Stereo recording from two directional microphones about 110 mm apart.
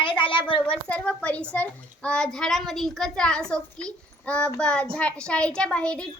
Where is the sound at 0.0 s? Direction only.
50° left (ahead or behind).